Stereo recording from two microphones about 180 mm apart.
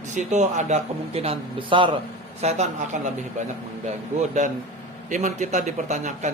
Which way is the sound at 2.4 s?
40° right (ahead or behind).